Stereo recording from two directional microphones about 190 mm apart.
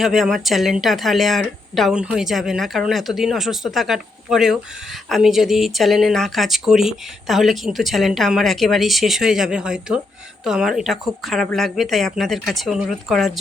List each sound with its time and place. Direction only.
0.0 s speech: centre (ahead or behind)